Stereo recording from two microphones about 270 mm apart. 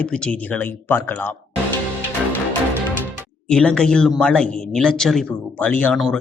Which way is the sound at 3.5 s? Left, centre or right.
Centre.